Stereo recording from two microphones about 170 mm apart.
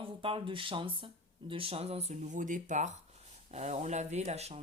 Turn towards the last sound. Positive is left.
turn(degrees=-40)  # may be behind; listen again after turning